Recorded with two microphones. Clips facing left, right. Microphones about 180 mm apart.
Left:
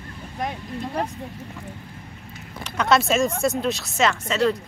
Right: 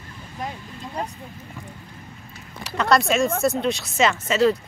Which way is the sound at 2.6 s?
Centre (ahead or behind).